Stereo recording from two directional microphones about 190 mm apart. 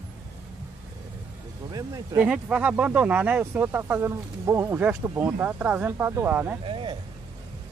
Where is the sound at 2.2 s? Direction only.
5° right (ahead or behind).